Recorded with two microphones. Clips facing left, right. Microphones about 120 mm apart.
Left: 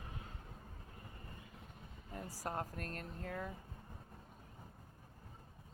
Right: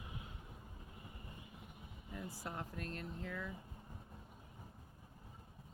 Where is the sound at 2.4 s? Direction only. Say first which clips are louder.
Left 7 dB; 40° left (ahead or behind).